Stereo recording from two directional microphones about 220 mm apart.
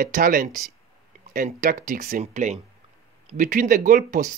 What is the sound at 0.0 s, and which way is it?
Speech, 35° right (ahead or behind).